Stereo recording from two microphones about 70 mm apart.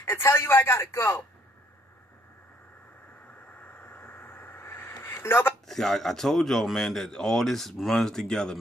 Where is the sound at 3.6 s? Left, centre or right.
Left.